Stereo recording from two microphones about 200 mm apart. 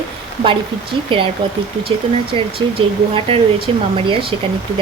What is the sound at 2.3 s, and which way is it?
Speech, 25° right (ahead or behind).